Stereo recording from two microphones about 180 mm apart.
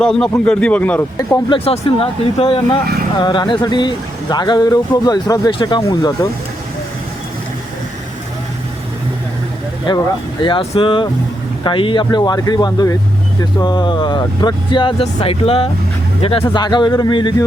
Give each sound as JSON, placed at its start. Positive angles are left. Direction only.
{"t": 0.0, "sound": "speech", "side_deg": 5}
{"t": 1.5, "sound": "speech", "side_deg": 30}
{"t": 2.8, "sound": "speech", "side_deg": -60}
{"t": 3.2, "sound": "speech", "side_deg": 25}
{"t": 9.9, "sound": "speech", "side_deg": 25}